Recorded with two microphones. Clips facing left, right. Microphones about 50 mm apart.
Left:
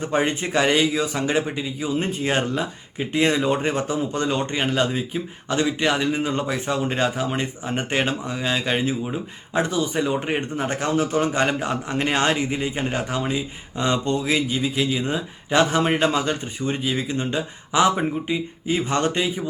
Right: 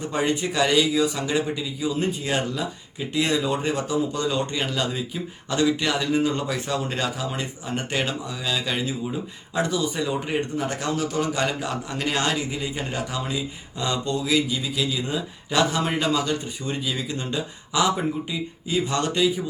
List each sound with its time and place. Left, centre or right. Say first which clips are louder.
0.0 s a man's voice: left 2 dB; left